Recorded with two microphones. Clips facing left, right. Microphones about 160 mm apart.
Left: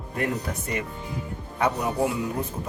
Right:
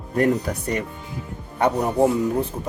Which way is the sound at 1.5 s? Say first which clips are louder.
Right 5 dB; 35° right (ahead or behind).